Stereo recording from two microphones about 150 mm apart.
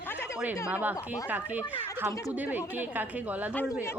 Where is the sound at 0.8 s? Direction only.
10° right (ahead or behind).